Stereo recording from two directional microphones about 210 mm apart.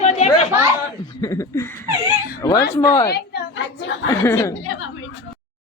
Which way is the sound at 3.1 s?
50° left (ahead or behind).